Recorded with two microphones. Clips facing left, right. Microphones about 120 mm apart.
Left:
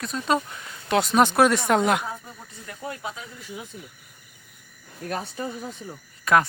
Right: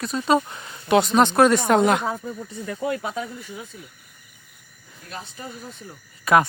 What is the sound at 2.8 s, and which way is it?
Speech, 90° right.